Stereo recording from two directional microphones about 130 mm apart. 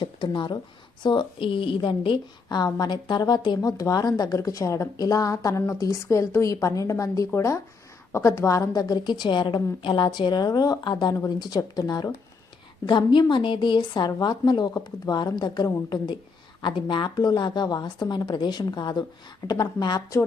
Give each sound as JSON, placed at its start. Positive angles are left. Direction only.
{"t": 0.0, "sound": "a woman's voice", "side_deg": 35}